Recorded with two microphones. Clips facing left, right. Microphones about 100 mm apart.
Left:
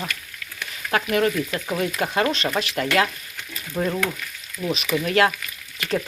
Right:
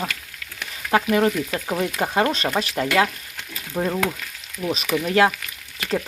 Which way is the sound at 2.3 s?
35° right (ahead or behind).